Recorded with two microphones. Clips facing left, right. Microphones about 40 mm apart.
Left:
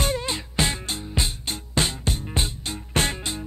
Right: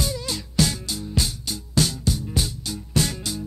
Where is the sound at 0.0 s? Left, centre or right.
Left.